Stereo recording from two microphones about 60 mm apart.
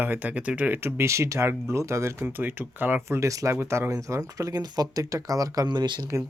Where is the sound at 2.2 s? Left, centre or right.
Right.